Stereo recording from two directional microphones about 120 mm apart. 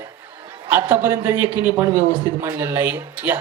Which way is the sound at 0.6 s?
20° right (ahead or behind).